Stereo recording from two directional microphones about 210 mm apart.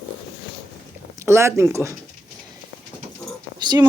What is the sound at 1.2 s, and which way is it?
Speech, 15° right (ahead or behind).